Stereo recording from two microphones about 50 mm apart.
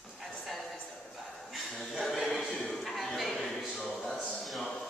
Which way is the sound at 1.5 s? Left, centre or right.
Centre.